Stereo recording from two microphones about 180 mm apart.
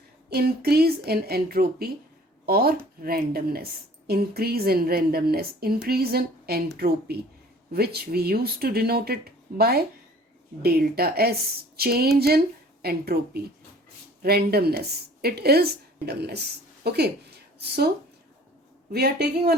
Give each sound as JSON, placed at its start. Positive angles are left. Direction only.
{"t": 0.3, "sound": "a woman's voice", "side_deg": -60}
{"t": 18.9, "sound": "a woman's voice", "side_deg": -60}